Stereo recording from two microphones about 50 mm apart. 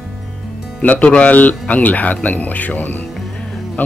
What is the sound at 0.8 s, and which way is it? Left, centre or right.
A man's voice, left.